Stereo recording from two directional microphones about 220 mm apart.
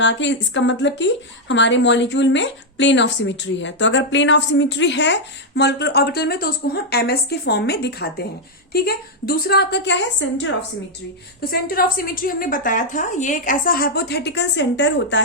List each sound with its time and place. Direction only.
0.0 s a woman's voice: 55° left (ahead or behind)
11.5 s a woman's voice: 40° left (ahead or behind)